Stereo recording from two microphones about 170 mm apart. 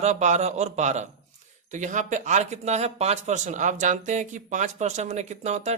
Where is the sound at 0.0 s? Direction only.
40° right (ahead or behind).